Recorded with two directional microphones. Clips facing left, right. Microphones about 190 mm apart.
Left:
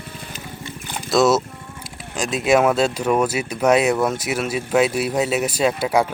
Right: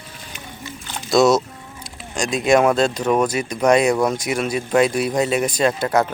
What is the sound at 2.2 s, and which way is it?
Speech, 5° left (ahead or behind).